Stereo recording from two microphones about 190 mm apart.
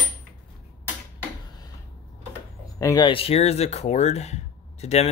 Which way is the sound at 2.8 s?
20° left (ahead or behind).